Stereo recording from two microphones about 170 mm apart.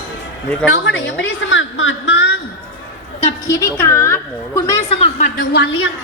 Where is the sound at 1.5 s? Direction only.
90° left.